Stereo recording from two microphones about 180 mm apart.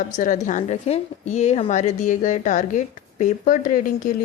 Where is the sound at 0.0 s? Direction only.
45° left (ahead or behind).